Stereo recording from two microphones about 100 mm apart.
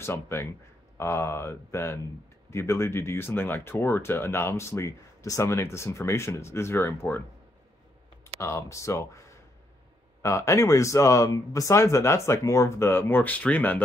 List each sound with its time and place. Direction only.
0.0 s speech: 25° left (ahead or behind)
8.4 s speech: 30° left (ahead or behind)
10.2 s speech: 30° left (ahead or behind)